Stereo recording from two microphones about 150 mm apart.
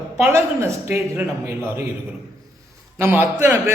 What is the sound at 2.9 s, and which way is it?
Speech, 15° right (ahead or behind).